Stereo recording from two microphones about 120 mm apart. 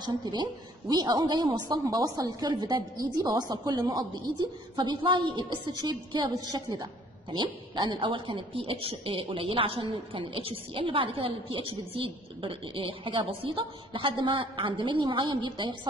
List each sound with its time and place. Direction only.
0.0 s a woman's voice: 40° right (ahead or behind)